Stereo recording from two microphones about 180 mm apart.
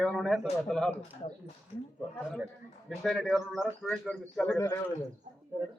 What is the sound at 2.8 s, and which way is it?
A man's voice, centre (ahead or behind).